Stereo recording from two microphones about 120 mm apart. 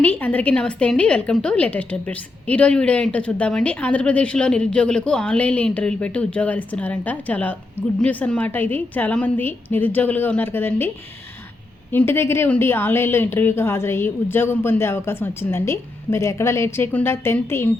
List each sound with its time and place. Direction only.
0.0 s a woman's voice: 15° left (ahead or behind)